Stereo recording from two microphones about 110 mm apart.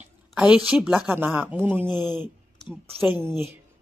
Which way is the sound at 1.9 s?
40° left (ahead or behind).